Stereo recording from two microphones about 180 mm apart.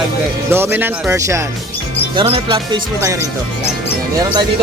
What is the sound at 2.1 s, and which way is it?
Speech, 30° right (ahead or behind).